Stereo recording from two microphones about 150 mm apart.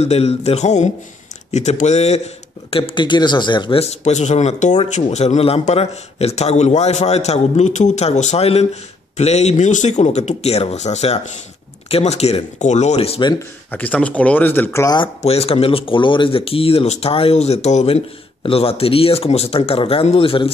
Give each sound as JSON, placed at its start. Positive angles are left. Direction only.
{"t": 0.0, "sound": "a man's voice", "side_deg": 45}
{"t": 2.7, "sound": "a man's voice", "side_deg": 35}
{"t": 13.7, "sound": "speech", "side_deg": 10}
{"t": 15.0, "sound": "speech", "side_deg": 40}